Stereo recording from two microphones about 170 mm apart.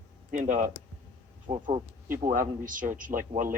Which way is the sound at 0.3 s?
50° right (ahead or behind).